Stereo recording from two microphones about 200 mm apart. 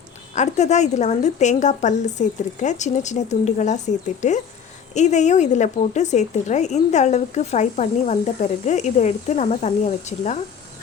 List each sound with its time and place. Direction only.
0.3 s speech: 35° left (ahead or behind)